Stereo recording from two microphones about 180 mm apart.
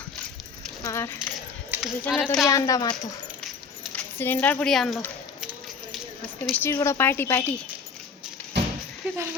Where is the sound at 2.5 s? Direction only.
20° left (ahead or behind).